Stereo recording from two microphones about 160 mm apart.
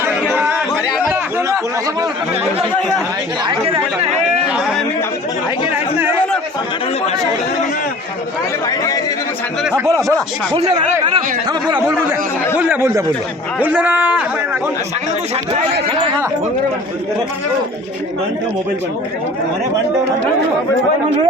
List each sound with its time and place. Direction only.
0.0 s chatter: 10° right (ahead or behind)
3.4 s speech: 35° right (ahead or behind)
4.4 s speech: 5° right (ahead or behind)
8.6 s speech: 20° left (ahead or behind)
9.6 s a man's voice: 15° right (ahead or behind)
10.5 s speech: 25° right (ahead or behind)
11.8 s a man's voice: 15° right (ahead or behind)